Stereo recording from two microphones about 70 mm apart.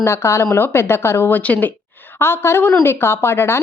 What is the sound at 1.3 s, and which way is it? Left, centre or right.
Speech, left.